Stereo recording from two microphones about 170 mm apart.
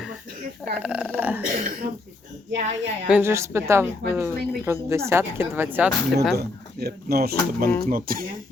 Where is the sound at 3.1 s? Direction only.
10° right (ahead or behind).